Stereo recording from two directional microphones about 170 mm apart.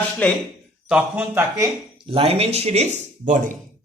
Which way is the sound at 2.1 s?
35° right (ahead or behind).